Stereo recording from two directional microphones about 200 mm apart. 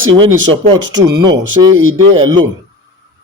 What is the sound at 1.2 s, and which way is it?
Speech, 20° right (ahead or behind).